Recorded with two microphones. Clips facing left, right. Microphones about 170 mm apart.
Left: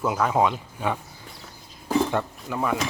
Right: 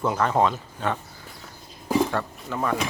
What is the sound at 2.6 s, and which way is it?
Speech, 5° left (ahead or behind).